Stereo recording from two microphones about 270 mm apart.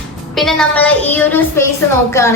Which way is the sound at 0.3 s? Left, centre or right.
Centre.